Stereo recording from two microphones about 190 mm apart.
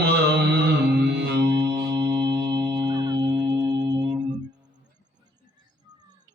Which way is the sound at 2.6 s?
20° right (ahead or behind).